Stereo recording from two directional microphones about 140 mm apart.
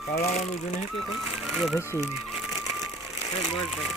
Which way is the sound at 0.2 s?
55° left (ahead or behind).